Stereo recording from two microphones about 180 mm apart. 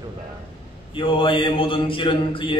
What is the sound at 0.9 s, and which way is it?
A man's voice, 30° left (ahead or behind).